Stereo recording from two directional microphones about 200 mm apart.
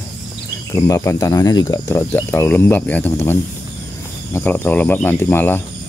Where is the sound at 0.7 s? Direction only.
15° left (ahead or behind).